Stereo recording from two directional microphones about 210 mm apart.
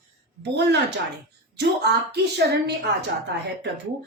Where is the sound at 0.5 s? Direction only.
55° right (ahead or behind).